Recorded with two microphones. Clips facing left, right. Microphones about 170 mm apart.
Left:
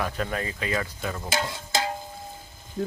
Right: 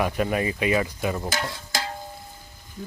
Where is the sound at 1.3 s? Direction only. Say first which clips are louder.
Left 2 dB; 25° left (ahead or behind).